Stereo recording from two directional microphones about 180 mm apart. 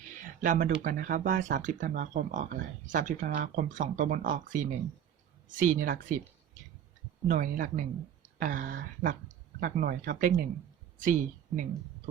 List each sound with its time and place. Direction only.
0.4 s speech: 45° right (ahead or behind)